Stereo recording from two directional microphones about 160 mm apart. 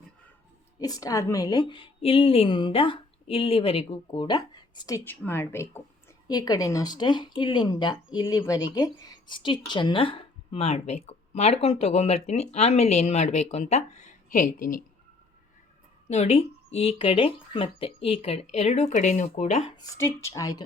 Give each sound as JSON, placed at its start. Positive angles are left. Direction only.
{"t": 0.8, "sound": "speech", "side_deg": 25}
{"t": 6.2, "sound": "speech", "side_deg": 25}
{"t": 16.0, "sound": "speech", "side_deg": 40}
{"t": 19.7, "sound": "speech", "side_deg": 20}